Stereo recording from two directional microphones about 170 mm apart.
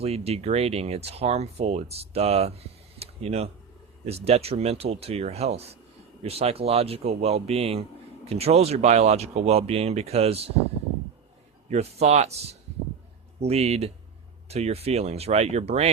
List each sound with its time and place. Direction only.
0.0 s speech: 35° right (ahead or behind)
11.7 s speech: 40° right (ahead or behind)